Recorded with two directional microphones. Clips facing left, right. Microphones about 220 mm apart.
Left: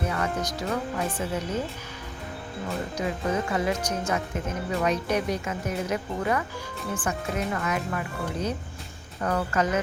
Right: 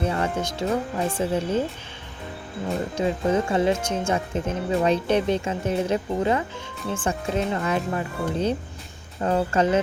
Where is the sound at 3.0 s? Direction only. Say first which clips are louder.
Right 6 dB; 30° right (ahead or behind).